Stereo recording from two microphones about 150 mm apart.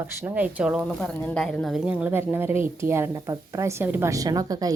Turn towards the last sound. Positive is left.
turn(degrees=-25)  # may be behind; listen again after turning